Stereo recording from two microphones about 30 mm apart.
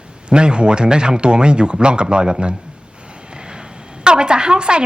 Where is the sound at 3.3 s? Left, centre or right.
Right.